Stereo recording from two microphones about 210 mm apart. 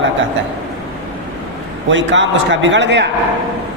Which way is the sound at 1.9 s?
60° right (ahead or behind).